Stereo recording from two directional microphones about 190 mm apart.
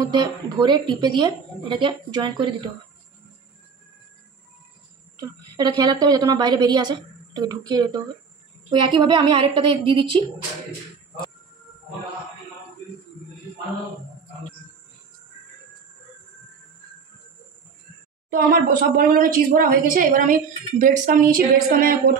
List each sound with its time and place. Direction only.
0.0 s a woman's voice: 25° right (ahead or behind)
5.1 s a woman's voice: 20° right (ahead or behind)
18.3 s a woman's voice: 45° right (ahead or behind)